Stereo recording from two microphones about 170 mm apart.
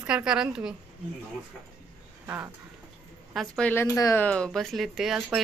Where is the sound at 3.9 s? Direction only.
20° left (ahead or behind).